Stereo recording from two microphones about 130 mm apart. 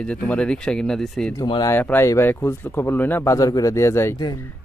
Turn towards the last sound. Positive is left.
turn(degrees=20)  # may be behind; listen again after turning